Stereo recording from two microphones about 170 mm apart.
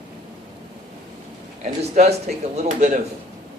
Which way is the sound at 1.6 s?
40° right (ahead or behind).